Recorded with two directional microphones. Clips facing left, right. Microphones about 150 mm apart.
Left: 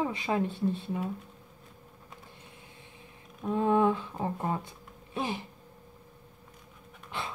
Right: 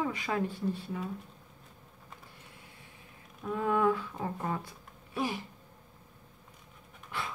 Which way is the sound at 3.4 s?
25° left (ahead or behind).